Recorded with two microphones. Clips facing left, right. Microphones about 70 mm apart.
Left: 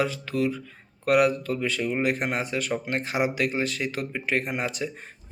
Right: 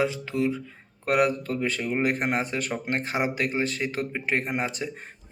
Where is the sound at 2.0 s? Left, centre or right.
Right.